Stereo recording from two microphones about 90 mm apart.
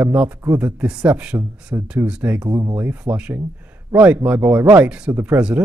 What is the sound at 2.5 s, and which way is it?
Speech, 45° right (ahead or behind).